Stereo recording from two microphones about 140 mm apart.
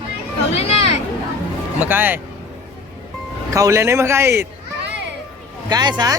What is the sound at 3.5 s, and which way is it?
Speech, 25° right (ahead or behind).